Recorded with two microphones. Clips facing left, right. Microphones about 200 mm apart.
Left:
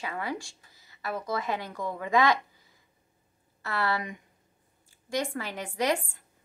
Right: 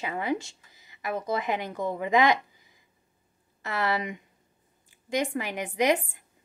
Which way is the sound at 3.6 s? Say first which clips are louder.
Right 2 dB; 20° right (ahead or behind).